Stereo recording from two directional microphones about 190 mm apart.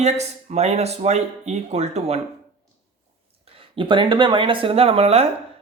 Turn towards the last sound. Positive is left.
turn(degrees=-30)  # may be behind; listen again after turning